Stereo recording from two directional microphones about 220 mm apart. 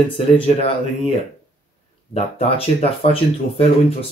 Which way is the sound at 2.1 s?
25° left (ahead or behind).